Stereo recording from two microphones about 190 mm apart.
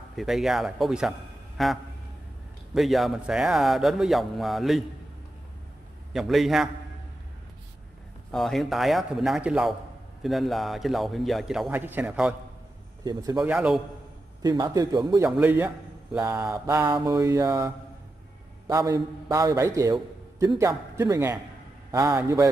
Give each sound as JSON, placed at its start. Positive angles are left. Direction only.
{"t": 0.1, "sound": "a man's voice", "side_deg": 0}
{"t": 6.1, "sound": "a man's voice", "side_deg": 0}
{"t": 8.3, "sound": "a man's voice", "side_deg": 0}
{"t": 13.0, "sound": "a man's voice", "side_deg": -20}
{"t": 13.4, "sound": "a man's voice", "side_deg": -5}
{"t": 14.4, "sound": "a man's voice", "side_deg": -20}
{"t": 15.2, "sound": "a man's voice", "side_deg": -5}
{"t": 16.5, "sound": "a man's voice", "side_deg": -20}